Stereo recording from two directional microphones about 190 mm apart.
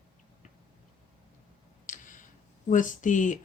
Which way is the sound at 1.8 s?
40° left (ahead or behind).